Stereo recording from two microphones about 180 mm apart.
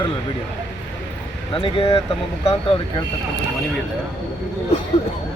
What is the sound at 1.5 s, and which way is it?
Speech, 30° left (ahead or behind).